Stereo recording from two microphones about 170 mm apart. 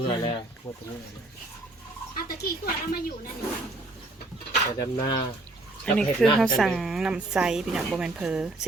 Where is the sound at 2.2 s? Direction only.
60° left (ahead or behind).